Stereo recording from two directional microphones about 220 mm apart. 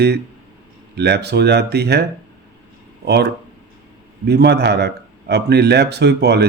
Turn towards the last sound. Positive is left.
turn(degrees=-50)  # may be behind; listen again after turning